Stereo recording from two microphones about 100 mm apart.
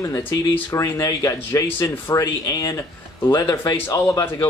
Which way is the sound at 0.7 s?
30° left (ahead or behind).